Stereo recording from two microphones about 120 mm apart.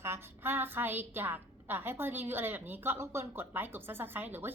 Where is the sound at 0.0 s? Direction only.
20° right (ahead or behind).